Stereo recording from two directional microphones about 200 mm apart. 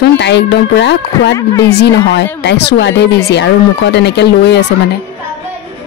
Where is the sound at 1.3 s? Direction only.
15° left (ahead or behind).